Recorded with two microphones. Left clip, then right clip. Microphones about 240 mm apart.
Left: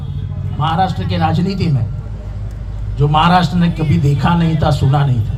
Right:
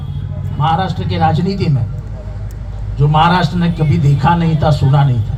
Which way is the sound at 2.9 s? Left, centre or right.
Left.